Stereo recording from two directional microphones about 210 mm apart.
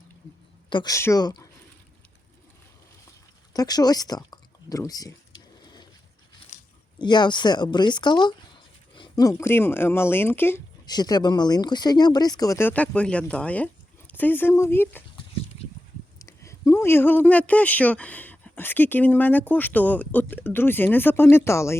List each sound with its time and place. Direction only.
0.7 s speech: 20° left (ahead or behind)
3.5 s a sound: 20° left (ahead or behind)
7.0 s speech: 20° left (ahead or behind)
16.1 s speech: 15° left (ahead or behind)